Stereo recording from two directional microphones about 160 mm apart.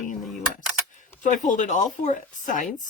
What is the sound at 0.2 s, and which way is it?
Keys jangling, centre (ahead or behind).